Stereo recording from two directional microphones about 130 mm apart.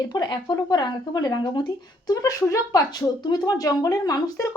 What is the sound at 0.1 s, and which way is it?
Speech, 35° left (ahead or behind).